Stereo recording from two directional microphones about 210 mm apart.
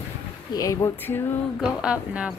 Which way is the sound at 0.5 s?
15° left (ahead or behind).